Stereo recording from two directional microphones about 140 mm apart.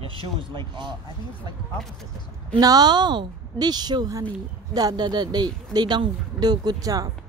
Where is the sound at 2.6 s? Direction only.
30° right (ahead or behind).